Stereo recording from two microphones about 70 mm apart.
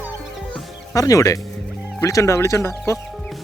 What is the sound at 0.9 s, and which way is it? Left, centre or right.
Speech, left.